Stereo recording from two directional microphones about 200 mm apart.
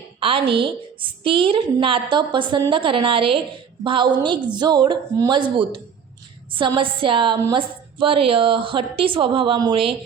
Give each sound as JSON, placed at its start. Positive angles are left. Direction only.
{"t": 0.2, "sound": "a woman's voice", "side_deg": -25}